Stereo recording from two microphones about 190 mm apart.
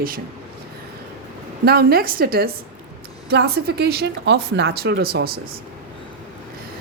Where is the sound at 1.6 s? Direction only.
55° right (ahead or behind).